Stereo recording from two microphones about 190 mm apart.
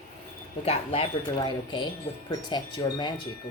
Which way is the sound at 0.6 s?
30° left (ahead or behind).